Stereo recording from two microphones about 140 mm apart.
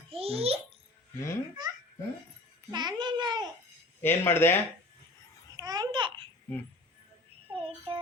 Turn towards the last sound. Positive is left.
turn(degrees=-40)  # may be behind; listen again after turning